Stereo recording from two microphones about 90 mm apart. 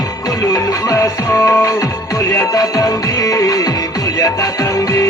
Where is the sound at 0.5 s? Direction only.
40° left (ahead or behind).